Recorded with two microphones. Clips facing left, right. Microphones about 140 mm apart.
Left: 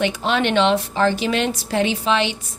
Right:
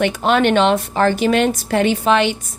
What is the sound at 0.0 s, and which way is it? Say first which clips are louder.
A woman's voice: right 5 dB; 50° right (ahead or behind).